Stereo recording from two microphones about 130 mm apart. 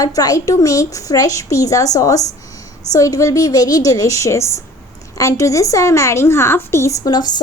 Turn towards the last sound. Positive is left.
turn(degrees=30)  # may be behind; listen again after turning